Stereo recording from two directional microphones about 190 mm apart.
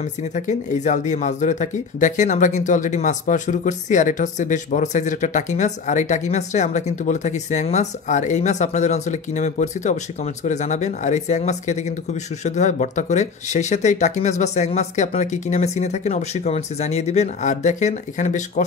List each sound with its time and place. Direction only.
0.5 s speech: 40° left (ahead or behind)